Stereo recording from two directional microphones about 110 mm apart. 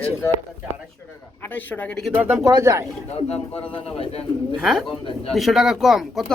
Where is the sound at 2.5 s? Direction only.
30° right (ahead or behind).